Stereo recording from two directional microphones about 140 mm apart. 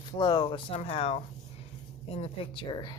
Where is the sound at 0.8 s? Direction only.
45° left (ahead or behind).